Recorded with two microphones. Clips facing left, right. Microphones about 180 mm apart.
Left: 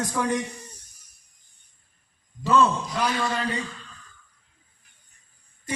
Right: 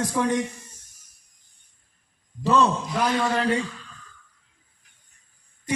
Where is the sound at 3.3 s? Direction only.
65° right (ahead or behind).